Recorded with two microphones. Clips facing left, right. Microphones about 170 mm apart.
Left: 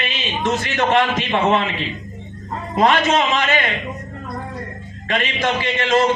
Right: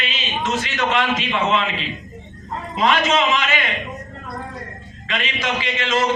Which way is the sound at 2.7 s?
50° left (ahead or behind).